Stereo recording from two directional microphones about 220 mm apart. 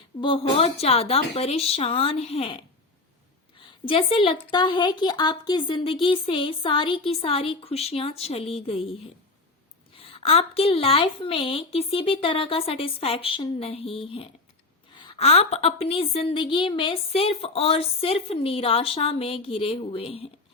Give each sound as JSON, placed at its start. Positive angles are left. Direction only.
{"t": 0.2, "sound": "a woman's voice", "side_deg": 25}
{"t": 3.8, "sound": "a woman's voice", "side_deg": 25}